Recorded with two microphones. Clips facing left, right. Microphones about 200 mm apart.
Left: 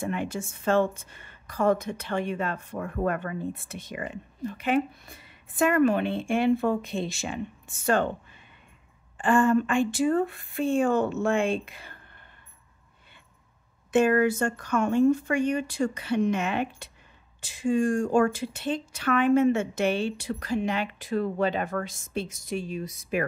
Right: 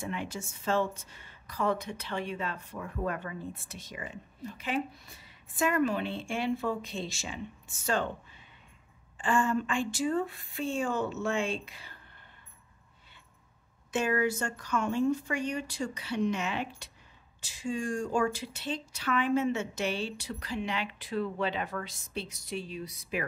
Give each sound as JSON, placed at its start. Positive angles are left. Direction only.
{"t": 0.0, "sound": "a woman's voice", "side_deg": 55}
{"t": 9.2, "sound": "a woman's voice", "side_deg": 55}
{"t": 13.9, "sound": "speech", "side_deg": 55}